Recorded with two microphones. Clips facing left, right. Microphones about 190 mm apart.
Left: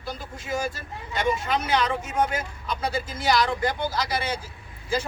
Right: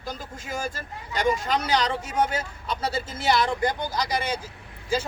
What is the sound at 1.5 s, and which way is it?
Speech, 40° right (ahead or behind).